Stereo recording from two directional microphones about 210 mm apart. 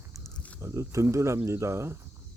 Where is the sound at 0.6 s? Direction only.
15° right (ahead or behind).